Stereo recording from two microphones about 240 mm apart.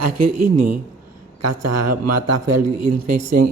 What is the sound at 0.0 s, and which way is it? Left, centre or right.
A man's voice, right.